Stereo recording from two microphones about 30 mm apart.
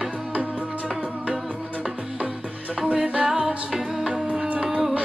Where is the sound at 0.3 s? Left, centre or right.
Right.